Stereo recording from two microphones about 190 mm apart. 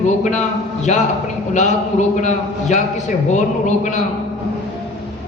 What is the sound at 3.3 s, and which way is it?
Speech, 40° left (ahead or behind).